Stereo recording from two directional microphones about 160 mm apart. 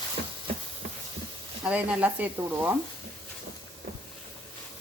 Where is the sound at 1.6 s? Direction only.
10° right (ahead or behind).